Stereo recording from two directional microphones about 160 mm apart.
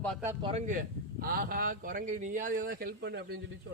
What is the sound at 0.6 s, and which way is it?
Speech, 55° right (ahead or behind).